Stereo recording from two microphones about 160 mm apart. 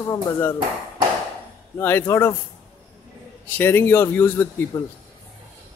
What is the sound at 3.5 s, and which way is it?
A man's voice, 15° left (ahead or behind).